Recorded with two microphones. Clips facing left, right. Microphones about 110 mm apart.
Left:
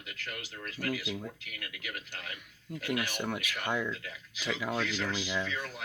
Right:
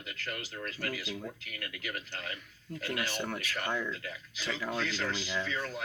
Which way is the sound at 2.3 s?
15° left (ahead or behind).